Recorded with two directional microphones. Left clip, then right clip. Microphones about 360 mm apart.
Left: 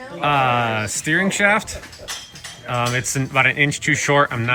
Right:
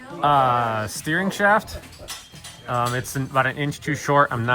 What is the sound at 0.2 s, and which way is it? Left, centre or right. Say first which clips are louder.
Speech: even; centre.